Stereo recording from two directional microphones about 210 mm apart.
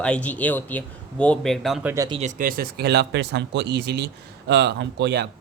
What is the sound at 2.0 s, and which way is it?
Speech, 25° right (ahead or behind).